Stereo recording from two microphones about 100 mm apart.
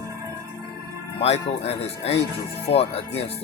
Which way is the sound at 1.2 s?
90° left.